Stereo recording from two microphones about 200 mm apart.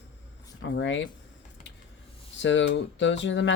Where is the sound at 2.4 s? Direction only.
65° left (ahead or behind).